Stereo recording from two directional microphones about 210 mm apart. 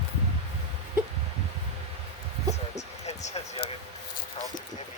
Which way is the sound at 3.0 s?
30° left (ahead or behind).